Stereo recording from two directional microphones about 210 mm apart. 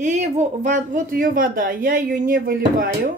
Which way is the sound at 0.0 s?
35° right (ahead or behind).